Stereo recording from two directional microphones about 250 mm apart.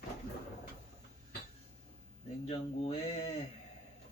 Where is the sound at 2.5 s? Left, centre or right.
Left.